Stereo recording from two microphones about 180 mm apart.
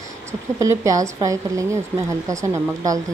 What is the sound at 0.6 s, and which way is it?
A woman's voice, 15° right (ahead or behind).